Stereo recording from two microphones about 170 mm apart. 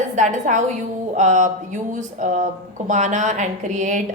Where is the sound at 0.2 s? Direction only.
45° right (ahead or behind).